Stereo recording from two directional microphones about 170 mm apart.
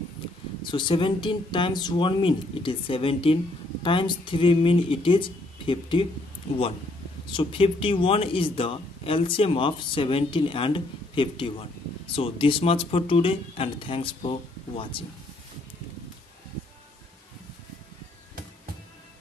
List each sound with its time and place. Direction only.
0.7 s speech: 30° left (ahead or behind)
7.2 s speech: 30° left (ahead or behind)